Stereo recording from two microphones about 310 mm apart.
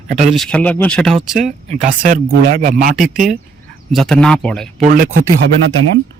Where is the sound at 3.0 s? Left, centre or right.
Centre.